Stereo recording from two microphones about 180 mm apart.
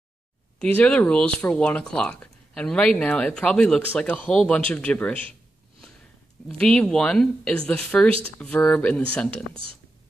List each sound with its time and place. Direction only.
0.6 s speech: 10° left (ahead or behind)
6.6 s speech: 5° left (ahead or behind)
9.5 s speech: 30° right (ahead or behind)